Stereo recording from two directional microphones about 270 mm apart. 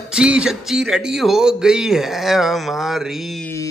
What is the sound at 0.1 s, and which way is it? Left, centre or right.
Speech, centre.